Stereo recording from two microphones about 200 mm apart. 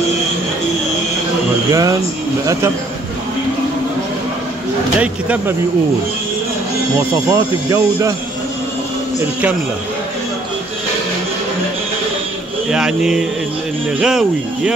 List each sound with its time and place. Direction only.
1.7 s speech: 15° right (ahead or behind)
5.0 s speech: 5° right (ahead or behind)
7.0 s speech: 15° right (ahead or behind)
12.6 s speech: 5° right (ahead or behind)